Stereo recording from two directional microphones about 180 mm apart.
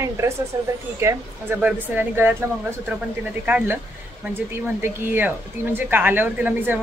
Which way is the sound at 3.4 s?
10° right (ahead or behind).